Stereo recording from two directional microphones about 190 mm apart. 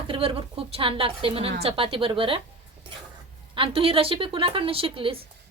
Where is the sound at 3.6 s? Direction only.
30° right (ahead or behind).